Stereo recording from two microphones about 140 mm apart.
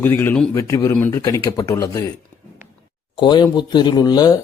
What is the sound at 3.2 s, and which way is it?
Speech, 35° left (ahead or behind).